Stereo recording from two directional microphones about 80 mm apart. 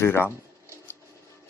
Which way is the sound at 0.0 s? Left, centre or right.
Left.